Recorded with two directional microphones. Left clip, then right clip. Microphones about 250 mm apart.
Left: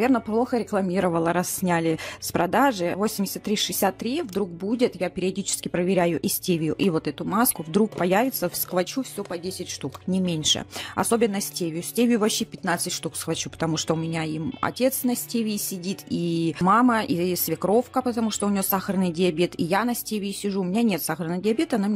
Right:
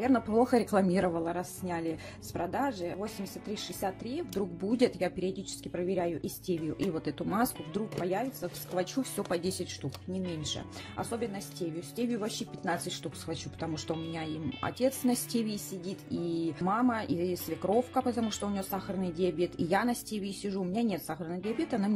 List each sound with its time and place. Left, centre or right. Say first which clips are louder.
0.3 s speech: left 3 dB; centre
1.1 s speech: left 10 dB; left
4.4 s speech: left 4 dB; centre
5.2 s speech: left 8 dB; left
7.7 s speech: left 11 dB; left
10.2 s speech: left 15 dB; left